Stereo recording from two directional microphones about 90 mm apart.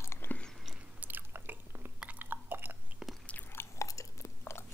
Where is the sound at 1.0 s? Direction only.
20° right (ahead or behind).